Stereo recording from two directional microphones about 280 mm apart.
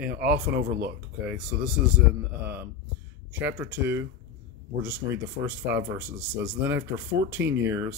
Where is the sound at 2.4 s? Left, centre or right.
Centre.